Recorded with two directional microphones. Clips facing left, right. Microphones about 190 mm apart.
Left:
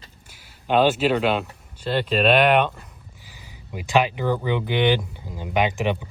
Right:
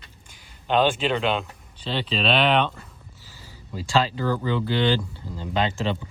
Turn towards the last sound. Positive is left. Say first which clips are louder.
# left 3 dB
turn(degrees=15)  # may be behind; listen again after turning